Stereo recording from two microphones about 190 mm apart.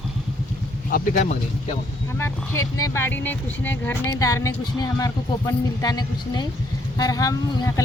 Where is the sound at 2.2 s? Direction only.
15° left (ahead or behind).